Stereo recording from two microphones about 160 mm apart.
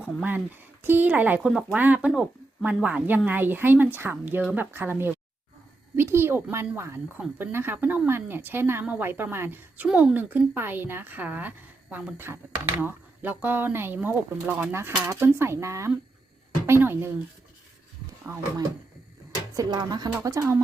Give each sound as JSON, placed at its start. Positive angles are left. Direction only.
{"t": 0.0, "sound": "speech", "side_deg": -10}
{"t": 18.3, "sound": "speech", "side_deg": -20}
{"t": 19.5, "sound": "a woman's voice", "side_deg": -25}